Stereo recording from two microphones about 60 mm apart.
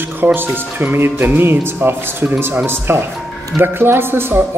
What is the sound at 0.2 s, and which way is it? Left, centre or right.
Speech, right.